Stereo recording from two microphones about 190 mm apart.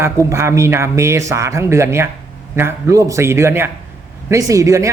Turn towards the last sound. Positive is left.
turn(degrees=-15)  # may be behind; listen again after turning